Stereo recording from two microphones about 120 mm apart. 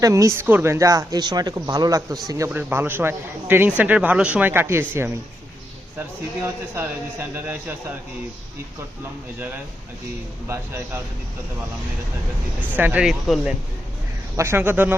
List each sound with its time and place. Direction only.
0.0 s speech: 25° right (ahead or behind)
2.5 s a man's voice: 15° right (ahead or behind)
10.5 s speech: 20° right (ahead or behind)
12.7 s speech: 15° right (ahead or behind)
14.3 s speech: 20° right (ahead or behind)